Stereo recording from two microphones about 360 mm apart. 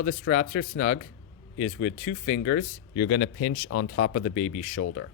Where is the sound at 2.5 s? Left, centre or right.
Left.